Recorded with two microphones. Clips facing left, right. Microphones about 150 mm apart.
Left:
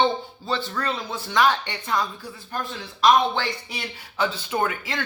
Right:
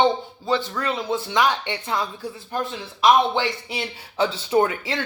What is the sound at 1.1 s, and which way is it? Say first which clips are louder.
Speech: left 1 dB; 20° right (ahead or behind).